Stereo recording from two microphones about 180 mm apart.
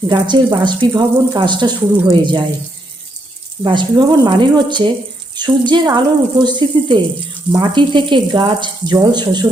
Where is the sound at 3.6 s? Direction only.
25° right (ahead or behind).